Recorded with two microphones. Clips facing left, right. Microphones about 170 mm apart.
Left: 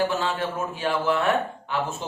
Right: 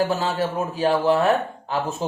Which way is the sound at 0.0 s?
40° right (ahead or behind).